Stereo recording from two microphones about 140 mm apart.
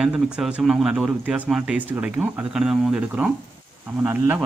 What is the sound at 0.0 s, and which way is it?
Speech, 5° right (ahead or behind).